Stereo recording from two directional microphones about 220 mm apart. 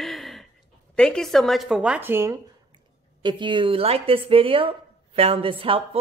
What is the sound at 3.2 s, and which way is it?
A woman's voice, 20° right (ahead or behind).